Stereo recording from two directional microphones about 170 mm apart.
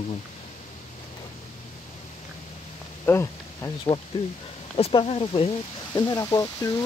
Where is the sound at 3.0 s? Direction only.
15° left (ahead or behind).